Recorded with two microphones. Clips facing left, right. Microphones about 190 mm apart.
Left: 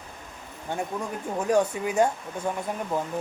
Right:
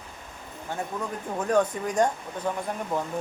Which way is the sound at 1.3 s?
10° left (ahead or behind).